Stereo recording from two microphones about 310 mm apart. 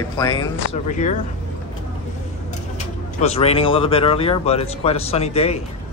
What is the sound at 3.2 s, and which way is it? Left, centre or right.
Speech, centre.